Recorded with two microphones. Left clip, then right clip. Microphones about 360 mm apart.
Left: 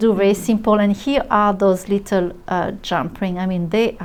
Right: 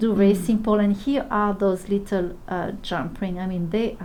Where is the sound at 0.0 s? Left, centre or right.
Left.